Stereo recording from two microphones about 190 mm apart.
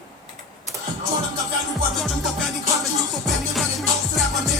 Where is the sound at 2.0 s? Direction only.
Centre (ahead or behind).